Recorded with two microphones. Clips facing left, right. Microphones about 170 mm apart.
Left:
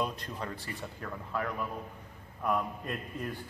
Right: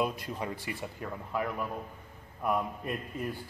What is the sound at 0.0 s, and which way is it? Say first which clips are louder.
Speech: right 3 dB; 10° right (ahead or behind).